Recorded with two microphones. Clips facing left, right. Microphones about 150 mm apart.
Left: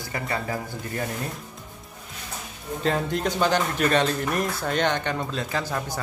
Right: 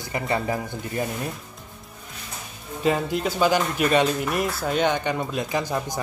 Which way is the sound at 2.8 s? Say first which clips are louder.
Right 2 dB; 5° right (ahead or behind).